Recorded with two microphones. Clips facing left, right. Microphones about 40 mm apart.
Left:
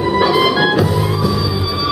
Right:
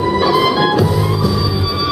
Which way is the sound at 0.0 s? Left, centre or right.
Centre.